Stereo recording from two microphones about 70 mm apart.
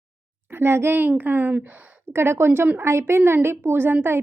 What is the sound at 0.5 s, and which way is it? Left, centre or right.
A child's voice, right.